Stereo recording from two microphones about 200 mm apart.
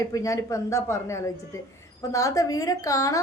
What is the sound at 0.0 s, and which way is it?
A woman's voice, 15° left (ahead or behind).